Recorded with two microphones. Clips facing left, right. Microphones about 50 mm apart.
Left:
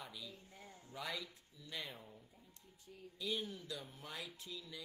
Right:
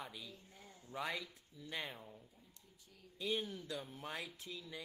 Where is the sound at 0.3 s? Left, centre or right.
Left.